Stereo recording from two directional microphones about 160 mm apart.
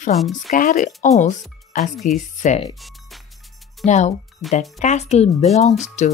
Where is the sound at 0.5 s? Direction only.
50° left (ahead or behind).